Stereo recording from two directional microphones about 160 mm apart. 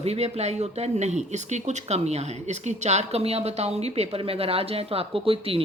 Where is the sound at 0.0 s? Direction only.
40° right (ahead or behind).